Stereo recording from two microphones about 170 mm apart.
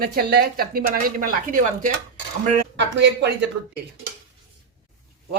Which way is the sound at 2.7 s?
90° right.